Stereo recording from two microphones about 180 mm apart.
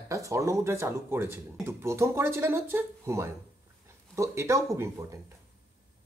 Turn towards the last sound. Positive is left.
turn(degrees=-15)  # may be behind; listen again after turning